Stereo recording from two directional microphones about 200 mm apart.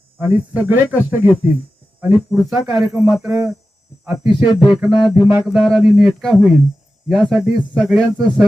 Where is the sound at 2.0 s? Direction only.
10° right (ahead or behind).